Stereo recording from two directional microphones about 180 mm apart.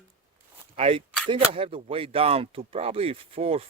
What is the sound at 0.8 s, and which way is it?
Speech, 30° right (ahead or behind).